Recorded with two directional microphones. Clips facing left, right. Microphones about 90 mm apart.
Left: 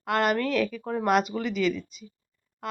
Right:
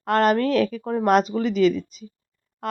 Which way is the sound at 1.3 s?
35° right (ahead or behind).